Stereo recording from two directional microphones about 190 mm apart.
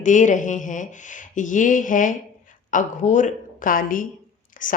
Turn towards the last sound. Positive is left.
turn(degrees=45)  # may be behind; listen again after turning